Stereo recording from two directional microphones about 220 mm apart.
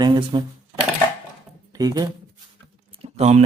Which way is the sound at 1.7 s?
15° right (ahead or behind).